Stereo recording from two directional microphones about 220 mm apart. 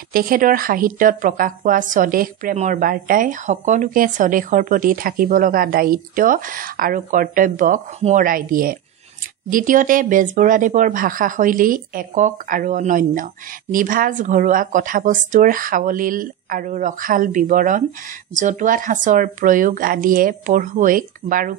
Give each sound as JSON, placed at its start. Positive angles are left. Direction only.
{"t": 0.1, "sound": "a woman's voice", "side_deg": -40}